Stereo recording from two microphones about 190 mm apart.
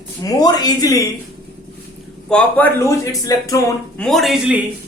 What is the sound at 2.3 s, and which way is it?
Speech, 10° left (ahead or behind).